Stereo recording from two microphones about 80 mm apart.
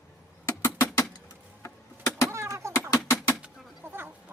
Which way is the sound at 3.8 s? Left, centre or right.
Right.